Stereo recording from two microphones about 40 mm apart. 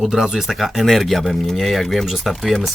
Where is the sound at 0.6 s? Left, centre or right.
Centre.